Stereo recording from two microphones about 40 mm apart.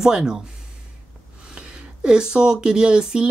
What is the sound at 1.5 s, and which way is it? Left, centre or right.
Speech, right.